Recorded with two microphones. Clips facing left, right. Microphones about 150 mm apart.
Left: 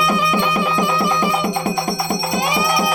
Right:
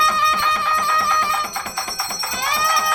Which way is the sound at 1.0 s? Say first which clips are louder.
Left 4 dB; 20° left (ahead or behind).